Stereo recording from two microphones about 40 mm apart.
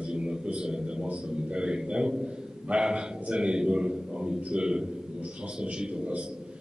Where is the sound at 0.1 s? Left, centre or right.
Right.